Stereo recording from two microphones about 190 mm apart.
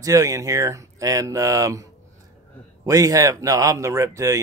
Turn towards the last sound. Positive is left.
turn(degrees=-15)  # may be behind; listen again after turning